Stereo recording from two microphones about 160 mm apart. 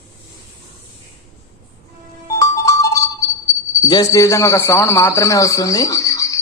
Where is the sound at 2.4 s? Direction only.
20° left (ahead or behind).